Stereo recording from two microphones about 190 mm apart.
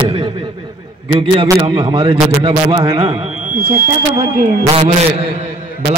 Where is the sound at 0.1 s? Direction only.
30° right (ahead or behind).